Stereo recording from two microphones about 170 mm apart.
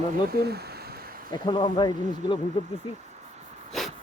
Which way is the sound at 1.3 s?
25° left (ahead or behind).